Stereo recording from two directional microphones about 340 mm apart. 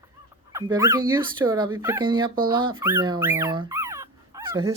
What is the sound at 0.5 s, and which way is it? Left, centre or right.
Speech, centre.